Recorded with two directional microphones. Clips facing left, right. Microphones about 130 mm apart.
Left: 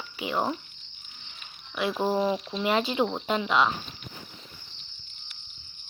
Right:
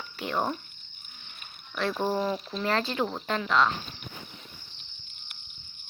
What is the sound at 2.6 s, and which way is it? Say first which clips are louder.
Speech: left 3 dB; 15° left (ahead or behind).